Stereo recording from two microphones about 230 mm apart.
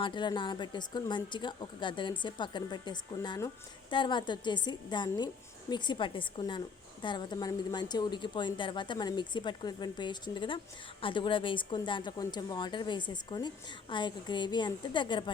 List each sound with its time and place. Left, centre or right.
0.0 s a woman's voice: centre